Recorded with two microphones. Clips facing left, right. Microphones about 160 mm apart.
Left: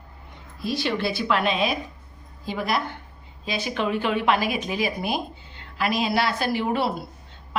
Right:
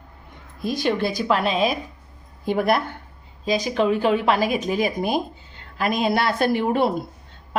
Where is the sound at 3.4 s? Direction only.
40° right (ahead or behind).